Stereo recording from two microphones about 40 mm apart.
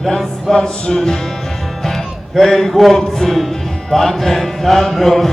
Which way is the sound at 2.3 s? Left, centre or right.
Centre.